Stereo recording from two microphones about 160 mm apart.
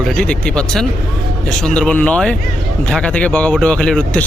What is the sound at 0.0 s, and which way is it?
Speech, 5° left (ahead or behind).